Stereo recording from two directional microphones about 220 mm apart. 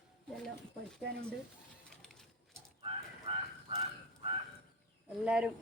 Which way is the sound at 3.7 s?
25° right (ahead or behind).